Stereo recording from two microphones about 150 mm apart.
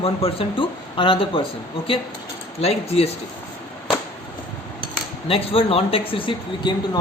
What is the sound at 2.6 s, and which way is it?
Speech, 45° left (ahead or behind).